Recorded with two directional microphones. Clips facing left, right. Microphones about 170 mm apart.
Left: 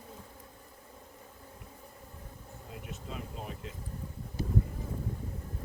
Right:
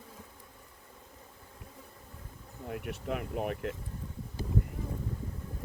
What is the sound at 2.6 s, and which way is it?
Speech, 65° right (ahead or behind).